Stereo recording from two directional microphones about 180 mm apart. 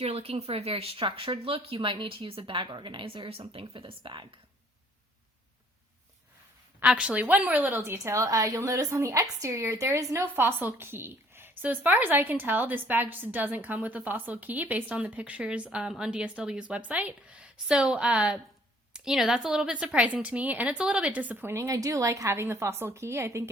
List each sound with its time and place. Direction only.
0.0 s speech: 35° right (ahead or behind)
6.7 s a woman's voice: 5° right (ahead or behind)